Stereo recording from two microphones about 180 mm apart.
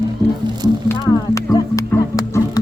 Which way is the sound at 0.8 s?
20° left (ahead or behind).